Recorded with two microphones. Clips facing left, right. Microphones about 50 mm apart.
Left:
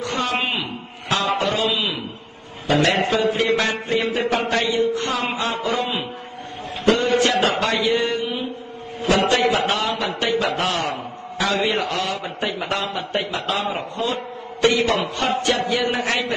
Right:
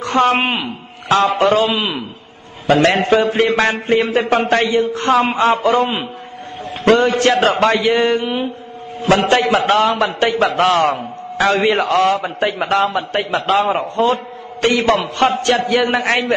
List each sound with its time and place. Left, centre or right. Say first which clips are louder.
0.0 s a woman's voice: right 8 dB; right
4.6 s a man's voice: right 5 dB; right
7.8 s speech: right 6 dB; right
9.0 s a man's voice: right 4 dB; right